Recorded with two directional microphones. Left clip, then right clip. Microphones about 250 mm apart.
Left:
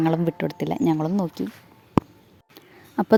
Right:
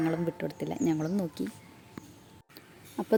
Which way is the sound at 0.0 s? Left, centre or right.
Left.